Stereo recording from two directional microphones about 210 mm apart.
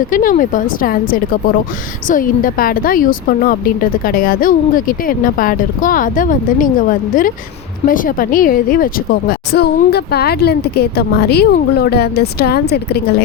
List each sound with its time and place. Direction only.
0.1 s speech: 40° left (ahead or behind)